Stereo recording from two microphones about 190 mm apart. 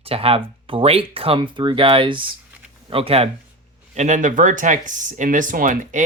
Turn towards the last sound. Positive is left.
turn(degrees=-45)  # may be behind; listen again after turning